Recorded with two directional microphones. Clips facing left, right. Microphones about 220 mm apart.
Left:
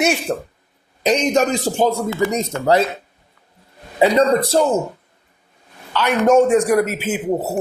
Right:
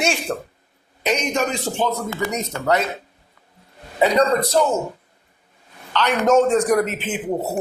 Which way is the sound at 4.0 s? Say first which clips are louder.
Left 3 dB; 30° left (ahead or behind).